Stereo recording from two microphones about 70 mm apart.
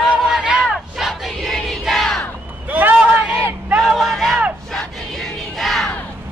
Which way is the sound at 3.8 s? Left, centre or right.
Centre.